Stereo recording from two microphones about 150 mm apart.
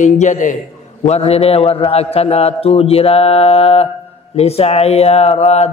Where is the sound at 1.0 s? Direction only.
45° left (ahead or behind).